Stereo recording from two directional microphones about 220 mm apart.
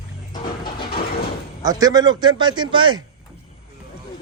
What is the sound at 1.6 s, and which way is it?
Speech, 15° right (ahead or behind).